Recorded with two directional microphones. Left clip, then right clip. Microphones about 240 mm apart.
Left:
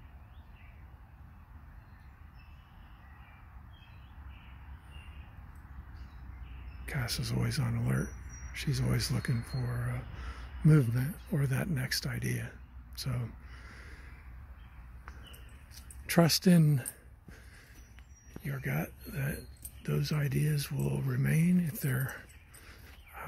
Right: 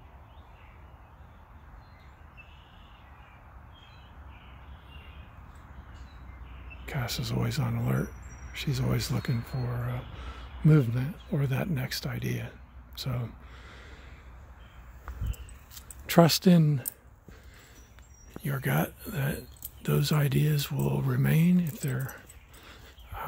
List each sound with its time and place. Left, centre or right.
6.9 s speech: centre
16.1 s speech: centre
18.4 s speech: right; by 22.2 s centre
23.1 s a sound: centre